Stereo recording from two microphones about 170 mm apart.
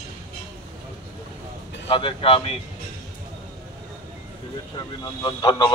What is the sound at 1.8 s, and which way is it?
Speech, 35° left (ahead or behind).